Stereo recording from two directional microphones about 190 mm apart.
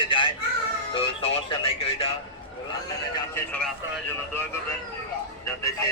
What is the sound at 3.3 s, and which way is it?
Speech, 10° left (ahead or behind).